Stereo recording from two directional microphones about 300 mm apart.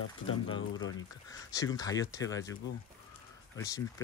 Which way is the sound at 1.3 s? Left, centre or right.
Centre.